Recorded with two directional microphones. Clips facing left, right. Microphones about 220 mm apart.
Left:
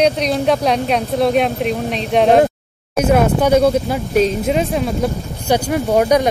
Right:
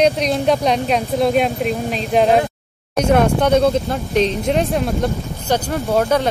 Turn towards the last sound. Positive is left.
turn(degrees=15)  # may be behind; listen again after turning